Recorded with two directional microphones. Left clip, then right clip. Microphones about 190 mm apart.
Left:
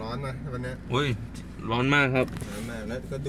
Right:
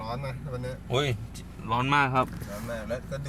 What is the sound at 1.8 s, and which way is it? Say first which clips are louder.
Speech: left 1 dB; 10° left (ahead or behind).